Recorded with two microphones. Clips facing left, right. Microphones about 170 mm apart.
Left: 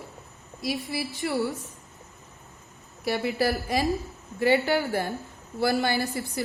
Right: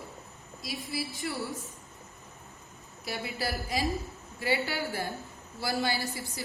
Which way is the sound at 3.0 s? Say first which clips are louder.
Left 9 dB; 65° left (ahead or behind).